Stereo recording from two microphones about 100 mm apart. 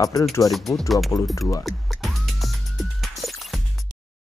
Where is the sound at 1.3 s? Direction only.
30° left (ahead or behind).